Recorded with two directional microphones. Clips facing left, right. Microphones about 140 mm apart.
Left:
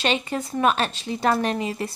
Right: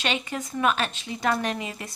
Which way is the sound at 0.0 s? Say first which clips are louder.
Left 4 dB; 35° left (ahead or behind).